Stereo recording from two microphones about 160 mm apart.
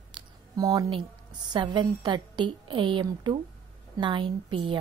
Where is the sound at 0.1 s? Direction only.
25° right (ahead or behind).